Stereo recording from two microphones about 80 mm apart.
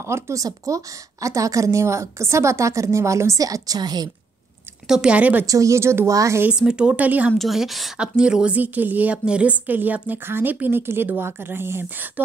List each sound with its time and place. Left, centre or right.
0.0 s a woman's voice: right
4.8 s speech: centre
5.5 s a woman's voice: right
6.5 s speech: centre
7.3 s a woman's voice: centre; by 12.1 s right